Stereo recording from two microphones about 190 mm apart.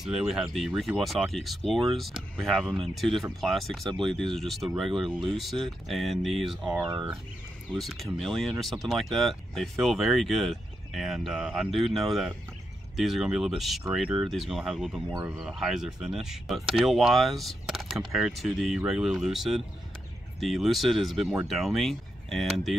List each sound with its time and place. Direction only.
0.0 s speech: 5° right (ahead or behind)
6.9 s speech: 25° right (ahead or behind)
7.7 s speech: centre (ahead or behind)